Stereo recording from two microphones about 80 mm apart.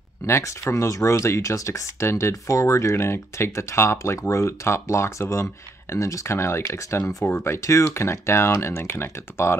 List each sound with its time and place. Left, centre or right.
0.3 s speech: left